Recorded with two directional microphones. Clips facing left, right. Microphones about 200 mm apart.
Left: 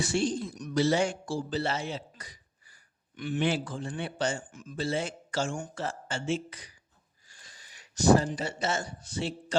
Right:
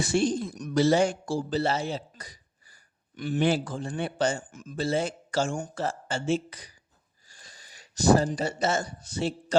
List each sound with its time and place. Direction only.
0.0 s speech: 45° right (ahead or behind)